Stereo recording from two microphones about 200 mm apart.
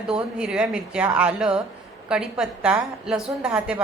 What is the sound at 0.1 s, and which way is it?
A woman's voice, 5° right (ahead or behind).